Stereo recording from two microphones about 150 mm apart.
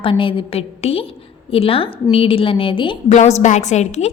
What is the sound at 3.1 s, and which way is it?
A woman's voice, 50° left (ahead or behind).